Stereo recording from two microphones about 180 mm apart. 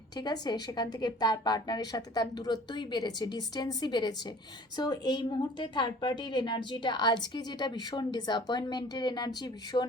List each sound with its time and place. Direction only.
0.2 s a woman's voice: 20° left (ahead or behind)